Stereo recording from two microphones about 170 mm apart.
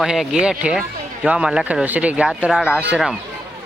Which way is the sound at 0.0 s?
Centre (ahead or behind).